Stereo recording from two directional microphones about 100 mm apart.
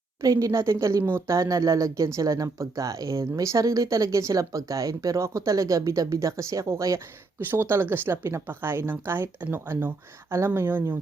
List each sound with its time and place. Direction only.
0.2 s speech: 35° right (ahead or behind)